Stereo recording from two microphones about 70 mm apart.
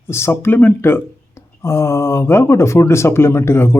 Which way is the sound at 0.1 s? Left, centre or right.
Left.